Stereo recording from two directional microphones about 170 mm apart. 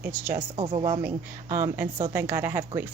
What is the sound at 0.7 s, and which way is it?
Speech, 30° right (ahead or behind).